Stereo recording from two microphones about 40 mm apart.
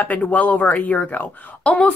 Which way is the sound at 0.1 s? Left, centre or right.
Left.